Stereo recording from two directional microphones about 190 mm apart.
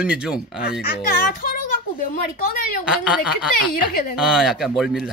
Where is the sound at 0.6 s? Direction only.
50° left (ahead or behind).